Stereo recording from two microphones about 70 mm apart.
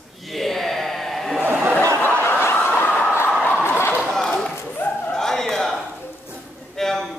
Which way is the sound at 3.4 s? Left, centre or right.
Left.